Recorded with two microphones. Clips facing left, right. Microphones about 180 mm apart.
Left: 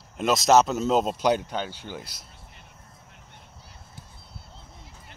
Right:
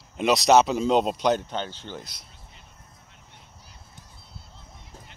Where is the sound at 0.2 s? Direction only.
Centre (ahead or behind).